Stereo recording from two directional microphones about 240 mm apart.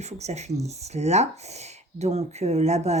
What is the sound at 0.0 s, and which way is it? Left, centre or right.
Speech, right.